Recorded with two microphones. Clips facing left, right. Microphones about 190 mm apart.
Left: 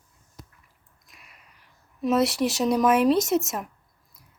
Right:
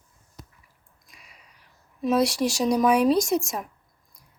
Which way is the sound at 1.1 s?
Centre (ahead or behind).